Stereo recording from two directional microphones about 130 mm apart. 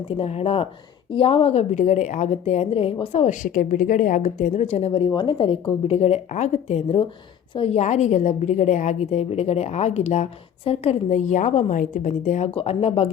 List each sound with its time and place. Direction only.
0.1 s a woman's voice: 50° left (ahead or behind)
3.4 s a woman's voice: 90° left; by 12.5 s 65° left (ahead or behind)
12.5 s speech: 50° left (ahead or behind)